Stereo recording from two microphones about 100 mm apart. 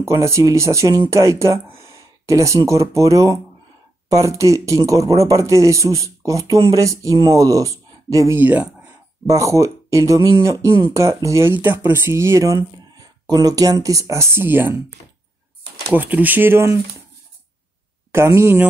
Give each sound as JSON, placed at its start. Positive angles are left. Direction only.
{"t": 0.0, "sound": "speech", "side_deg": -30}
{"t": 8.4, "sound": "speech", "side_deg": -15}
{"t": 9.2, "sound": "speech", "side_deg": -30}
{"t": 11.5, "sound": "speech", "side_deg": -20}
{"t": 15.9, "sound": "speech", "side_deg": -15}
{"t": 18.1, "sound": "speech", "side_deg": -25}